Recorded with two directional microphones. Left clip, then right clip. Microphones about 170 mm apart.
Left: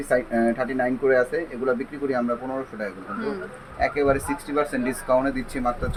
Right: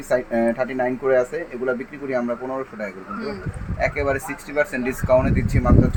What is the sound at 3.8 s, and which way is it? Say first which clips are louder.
Speech: even; 15° right (ahead or behind).